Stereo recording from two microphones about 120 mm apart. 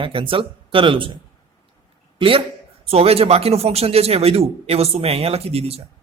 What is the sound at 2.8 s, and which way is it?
A man's voice, 55° right (ahead or behind).